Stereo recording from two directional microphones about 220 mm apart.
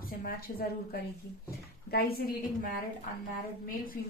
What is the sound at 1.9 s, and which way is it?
Speech, 45° left (ahead or behind).